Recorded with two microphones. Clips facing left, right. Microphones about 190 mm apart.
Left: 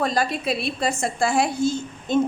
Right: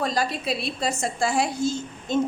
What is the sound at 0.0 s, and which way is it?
A woman's voice, 55° left (ahead or behind).